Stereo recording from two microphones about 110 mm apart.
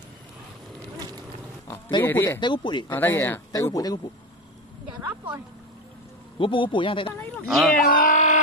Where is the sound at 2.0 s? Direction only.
20° left (ahead or behind).